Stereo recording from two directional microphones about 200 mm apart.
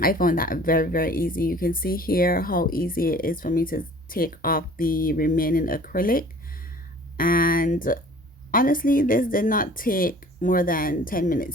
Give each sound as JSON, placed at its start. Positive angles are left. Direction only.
{"t": 0.0, "sound": "speech", "side_deg": 45}